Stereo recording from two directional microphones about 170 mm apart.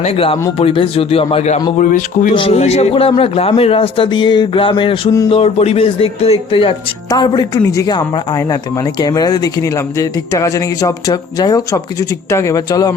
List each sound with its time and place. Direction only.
0.0 s a man's voice: 35° left (ahead or behind)
1.8 s speech: 50° left (ahead or behind)
2.3 s a man's voice: 30° left (ahead or behind)